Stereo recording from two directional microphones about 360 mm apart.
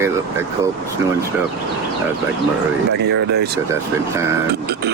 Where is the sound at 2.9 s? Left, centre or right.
Right.